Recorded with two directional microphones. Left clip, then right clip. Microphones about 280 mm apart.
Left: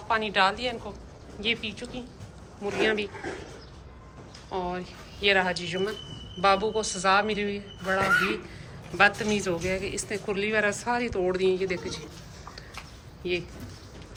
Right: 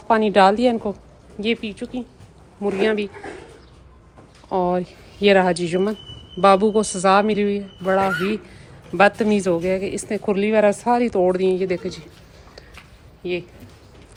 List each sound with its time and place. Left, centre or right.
0.1 s a woman's voice: centre
4.5 s a woman's voice: centre
13.2 s a woman's voice: centre